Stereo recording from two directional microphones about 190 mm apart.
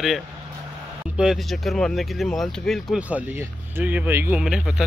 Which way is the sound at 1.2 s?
Centre (ahead or behind).